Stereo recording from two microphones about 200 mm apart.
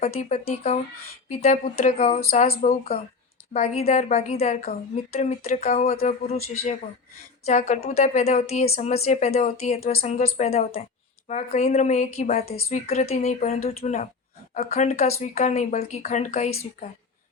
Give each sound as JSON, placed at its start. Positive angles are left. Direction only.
{"t": 0.0, "sound": "a woman's voice", "side_deg": 35}
{"t": 7.4, "sound": "a woman's voice", "side_deg": 35}